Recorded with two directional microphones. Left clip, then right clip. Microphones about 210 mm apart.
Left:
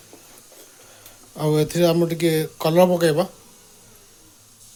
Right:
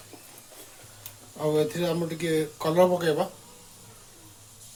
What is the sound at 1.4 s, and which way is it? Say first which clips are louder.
Speech: left 6 dB; 50° left (ahead or behind).